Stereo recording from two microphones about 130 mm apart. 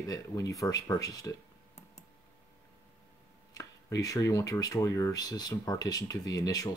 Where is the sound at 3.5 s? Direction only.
25° left (ahead or behind).